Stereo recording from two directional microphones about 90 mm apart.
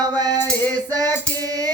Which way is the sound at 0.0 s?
45° right (ahead or behind).